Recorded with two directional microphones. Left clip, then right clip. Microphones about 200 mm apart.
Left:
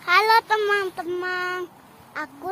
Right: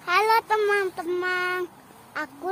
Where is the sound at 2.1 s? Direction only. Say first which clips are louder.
Even; 15° right (ahead or behind).